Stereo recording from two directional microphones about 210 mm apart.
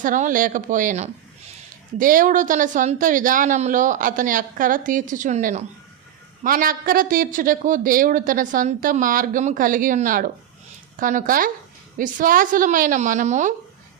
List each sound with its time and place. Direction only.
0.0 s speech: 40° right (ahead or behind)